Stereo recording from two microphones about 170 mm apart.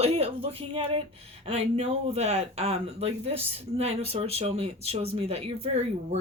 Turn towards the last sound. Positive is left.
turn(degrees=-35)  # may be behind; listen again after turning